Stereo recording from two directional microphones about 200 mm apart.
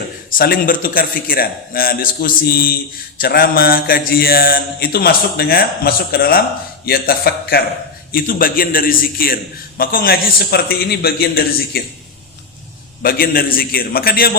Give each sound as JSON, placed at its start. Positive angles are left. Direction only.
{"t": 0.3, "sound": "mantra", "side_deg": 45}
{"t": 13.0, "sound": "mantra", "side_deg": 45}